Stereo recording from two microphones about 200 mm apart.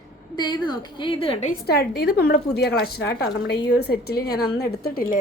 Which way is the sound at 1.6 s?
50° left (ahead or behind).